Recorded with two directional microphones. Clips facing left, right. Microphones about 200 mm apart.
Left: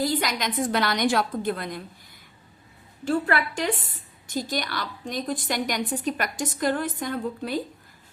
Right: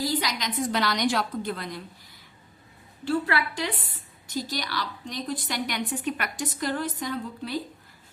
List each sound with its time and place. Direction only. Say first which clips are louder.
0.0 s a woman's voice: left 3 dB; 50° left (ahead or behind)
3.0 s a woman's voice: left 2 dB; 45° left (ahead or behind)